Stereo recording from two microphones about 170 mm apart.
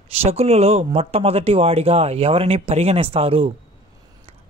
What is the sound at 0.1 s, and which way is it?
Speech, 35° right (ahead or behind).